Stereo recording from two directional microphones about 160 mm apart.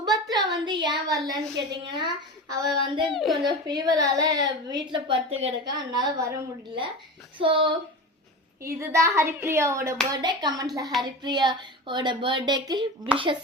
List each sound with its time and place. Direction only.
0.0 s a woman's voice: 25° right (ahead or behind)
3.1 s a woman's voice: centre (ahead or behind)
3.7 s a woman's voice: 25° right (ahead or behind)
7.3 s speech: 30° right (ahead or behind)
8.8 s a woman's voice: 15° right (ahead or behind)